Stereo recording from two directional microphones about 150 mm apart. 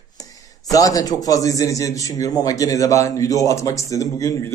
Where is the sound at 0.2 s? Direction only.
25° left (ahead or behind).